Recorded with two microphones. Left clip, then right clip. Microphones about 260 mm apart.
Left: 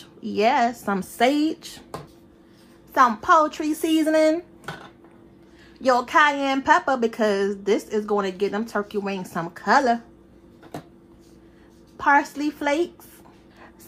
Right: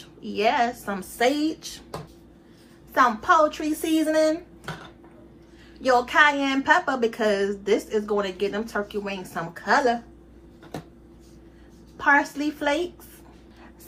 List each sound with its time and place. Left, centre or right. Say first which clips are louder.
0.2 s a woman's voice: left 2 dB; left
2.9 s a woman's voice: left 2 dB; left
5.8 s a woman's voice: left 1 dB; left
12.0 s a woman's voice: left 1 dB; left